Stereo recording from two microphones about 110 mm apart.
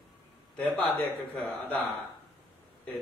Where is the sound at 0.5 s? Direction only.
10° left (ahead or behind).